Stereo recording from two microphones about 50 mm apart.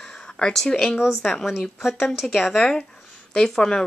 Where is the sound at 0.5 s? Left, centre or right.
Centre.